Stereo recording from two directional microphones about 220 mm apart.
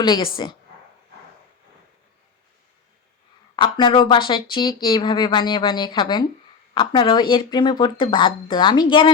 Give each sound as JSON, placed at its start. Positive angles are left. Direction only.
{"t": 0.0, "sound": "speech", "side_deg": 20}
{"t": 3.5, "sound": "speech", "side_deg": 20}